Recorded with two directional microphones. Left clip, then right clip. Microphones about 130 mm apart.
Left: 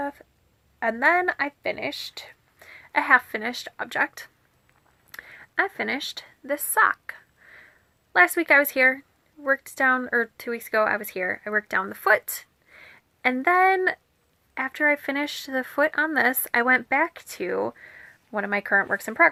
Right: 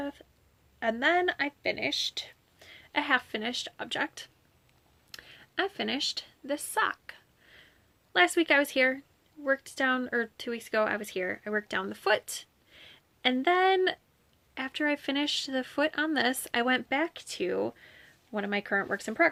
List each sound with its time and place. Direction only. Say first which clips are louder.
0.0 s a sound: left 7 dB; 30° right (ahead or behind)
0.9 s a woman's voice: left 6 dB; 40° right (ahead or behind)
5.2 s speech: left 7 dB; 50° right (ahead or behind)
8.1 s speech: left 6 dB; 40° right (ahead or behind)